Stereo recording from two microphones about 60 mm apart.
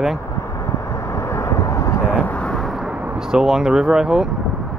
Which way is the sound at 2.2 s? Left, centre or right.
Left.